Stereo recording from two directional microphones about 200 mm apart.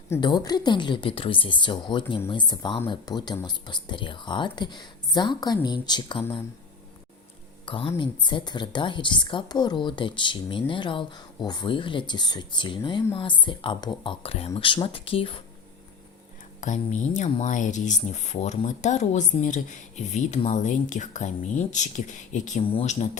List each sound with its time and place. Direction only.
0.1 s a woman's voice: 20° left (ahead or behind)
7.6 s a woman's voice: 25° left (ahead or behind)
16.6 s speech: 35° left (ahead or behind)